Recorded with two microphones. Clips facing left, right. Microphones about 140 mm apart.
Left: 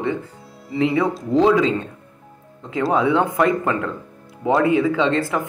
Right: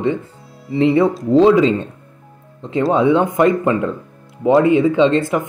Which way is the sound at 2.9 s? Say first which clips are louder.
Right 4 dB; 25° right (ahead or behind).